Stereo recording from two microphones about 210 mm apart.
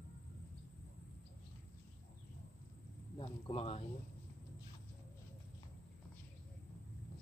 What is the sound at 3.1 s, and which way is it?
Speech, 25° left (ahead or behind).